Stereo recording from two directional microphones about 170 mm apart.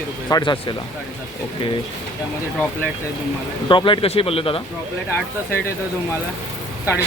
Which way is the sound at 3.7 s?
30° left (ahead or behind).